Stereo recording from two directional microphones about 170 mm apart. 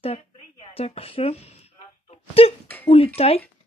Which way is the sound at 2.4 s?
35° left (ahead or behind).